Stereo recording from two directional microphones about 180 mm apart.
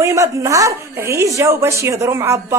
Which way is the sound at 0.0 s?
15° right (ahead or behind).